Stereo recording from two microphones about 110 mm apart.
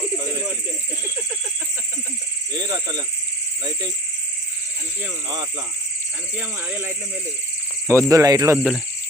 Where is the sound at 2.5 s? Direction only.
40° right (ahead or behind).